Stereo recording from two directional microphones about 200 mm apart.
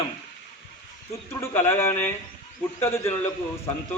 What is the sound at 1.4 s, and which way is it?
Speech, 10° left (ahead or behind).